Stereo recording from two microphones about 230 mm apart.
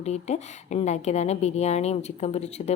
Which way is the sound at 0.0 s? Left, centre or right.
Left.